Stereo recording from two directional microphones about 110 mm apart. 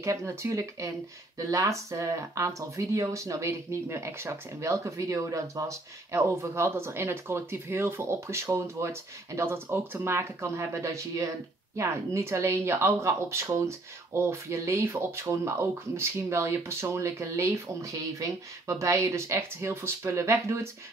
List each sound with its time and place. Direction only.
0.0 s speech: 30° right (ahead or behind)